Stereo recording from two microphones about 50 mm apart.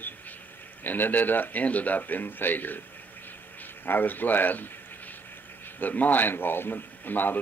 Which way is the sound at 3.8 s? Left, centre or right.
Left.